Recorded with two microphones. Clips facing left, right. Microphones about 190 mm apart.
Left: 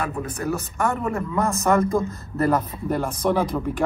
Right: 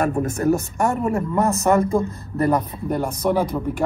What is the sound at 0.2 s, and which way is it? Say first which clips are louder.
Speech: right 7 dB; 45° right (ahead or behind).